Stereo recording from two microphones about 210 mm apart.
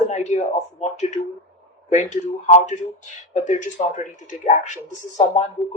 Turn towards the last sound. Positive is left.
turn(degrees=35)  # may be behind; listen again after turning